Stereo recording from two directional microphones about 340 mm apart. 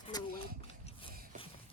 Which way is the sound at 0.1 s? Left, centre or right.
Centre.